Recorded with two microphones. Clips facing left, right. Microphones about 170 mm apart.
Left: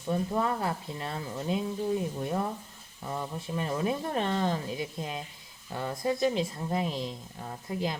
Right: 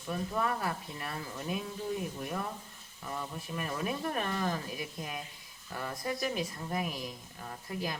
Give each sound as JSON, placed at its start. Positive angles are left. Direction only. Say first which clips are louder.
{"t": 0.1, "sound": "speech", "louder": "left 4 dB", "side_deg": 25}